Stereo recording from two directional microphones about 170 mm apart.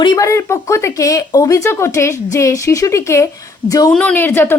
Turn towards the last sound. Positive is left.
turn(degrees=15)  # may be behind; listen again after turning